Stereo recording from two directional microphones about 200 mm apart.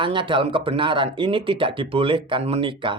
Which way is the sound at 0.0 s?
25° right (ahead or behind).